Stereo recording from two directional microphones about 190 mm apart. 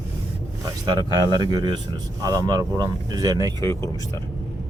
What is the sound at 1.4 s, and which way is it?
Speech, 20° right (ahead or behind).